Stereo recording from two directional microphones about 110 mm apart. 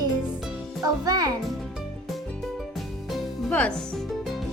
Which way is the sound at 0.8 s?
35° right (ahead or behind).